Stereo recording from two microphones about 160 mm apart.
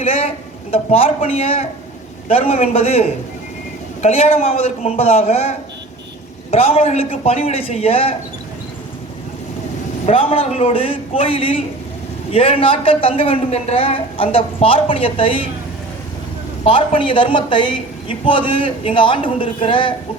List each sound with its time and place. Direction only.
0.0 s a sound: 35° left (ahead or behind)
0.7 s a woman's voice: 35° left (ahead or behind)
10.1 s a woman's voice: 35° left (ahead or behind)
16.6 s a woman's voice: 35° left (ahead or behind)